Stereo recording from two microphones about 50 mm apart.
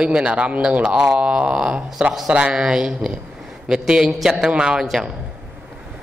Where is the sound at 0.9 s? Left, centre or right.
Centre.